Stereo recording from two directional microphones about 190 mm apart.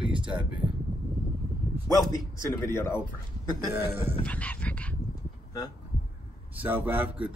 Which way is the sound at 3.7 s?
10° right (ahead or behind).